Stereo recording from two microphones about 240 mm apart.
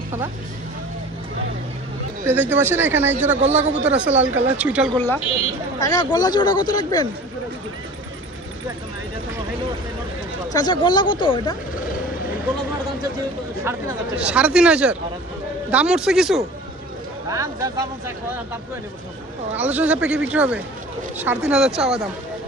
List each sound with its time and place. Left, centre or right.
2.2 s speech: centre
3.2 s speech: right
3.8 s speech: centre
4.9 s speech: centre
10.5 s speech: centre
13.7 s speech: centre
17.2 s speech: centre
19.5 s speech: centre